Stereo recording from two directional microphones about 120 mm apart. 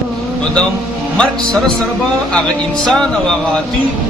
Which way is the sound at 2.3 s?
5° left (ahead or behind).